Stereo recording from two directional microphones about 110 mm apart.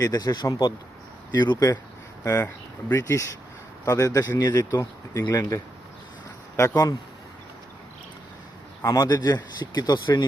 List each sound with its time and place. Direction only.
0.0 s speech: 35° left (ahead or behind)
6.6 s speech: 35° left (ahead or behind)
8.8 s speech: 35° left (ahead or behind)